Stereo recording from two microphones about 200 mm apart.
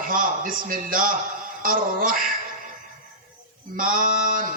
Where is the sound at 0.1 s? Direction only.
45° right (ahead or behind).